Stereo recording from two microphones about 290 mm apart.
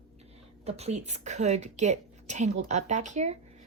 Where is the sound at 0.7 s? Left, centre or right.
Right.